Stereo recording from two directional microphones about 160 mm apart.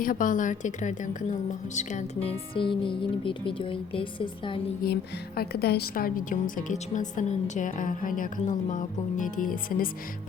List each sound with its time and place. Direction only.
0.0 s a woman's voice: 60° left (ahead or behind)
2.6 s speech: 30° left (ahead or behind)
4.8 s music: 70° left (ahead or behind)
5.4 s a woman's voice: 80° left; by 9.9 s 60° left (ahead or behind)